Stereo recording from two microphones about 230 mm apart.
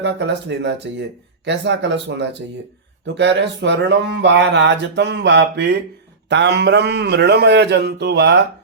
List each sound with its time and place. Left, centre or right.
0.0 s speech: right